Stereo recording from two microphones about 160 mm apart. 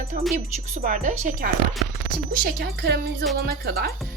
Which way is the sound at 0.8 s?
65° right (ahead or behind).